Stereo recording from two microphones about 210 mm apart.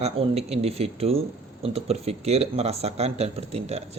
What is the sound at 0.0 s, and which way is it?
Speech, 30° right (ahead or behind).